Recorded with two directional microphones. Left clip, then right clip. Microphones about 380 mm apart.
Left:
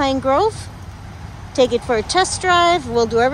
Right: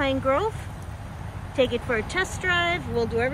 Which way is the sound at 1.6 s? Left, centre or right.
Centre.